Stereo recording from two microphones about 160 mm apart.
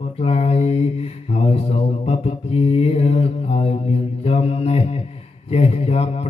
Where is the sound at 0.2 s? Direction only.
40° left (ahead or behind).